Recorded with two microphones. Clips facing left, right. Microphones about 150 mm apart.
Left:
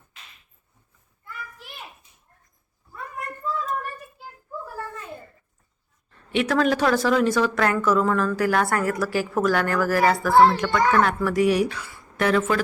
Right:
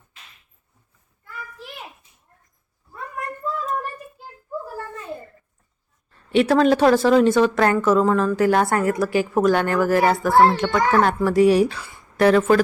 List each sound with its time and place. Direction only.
6.1 s a woman's voice: 30° right (ahead or behind)